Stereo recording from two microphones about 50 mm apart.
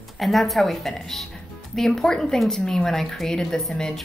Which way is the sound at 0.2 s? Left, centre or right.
Centre.